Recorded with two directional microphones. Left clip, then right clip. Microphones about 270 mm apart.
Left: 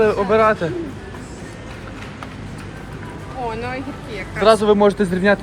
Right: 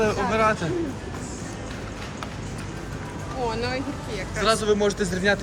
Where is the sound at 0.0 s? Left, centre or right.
Centre.